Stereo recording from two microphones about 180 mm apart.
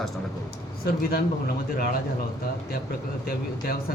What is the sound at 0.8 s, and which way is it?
Speech, 60° left (ahead or behind).